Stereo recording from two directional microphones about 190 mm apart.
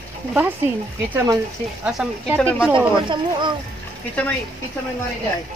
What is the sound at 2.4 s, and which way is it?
Speech, 10° left (ahead or behind).